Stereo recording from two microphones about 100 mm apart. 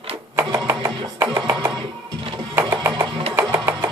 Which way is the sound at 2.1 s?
65° right (ahead or behind).